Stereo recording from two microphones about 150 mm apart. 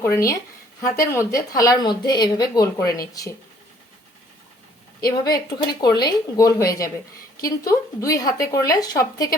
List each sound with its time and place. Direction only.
0.0 s speech: 20° left (ahead or behind)
5.2 s speech: 25° left (ahead or behind)